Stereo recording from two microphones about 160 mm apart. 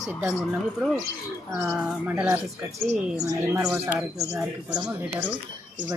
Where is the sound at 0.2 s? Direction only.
Centre (ahead or behind).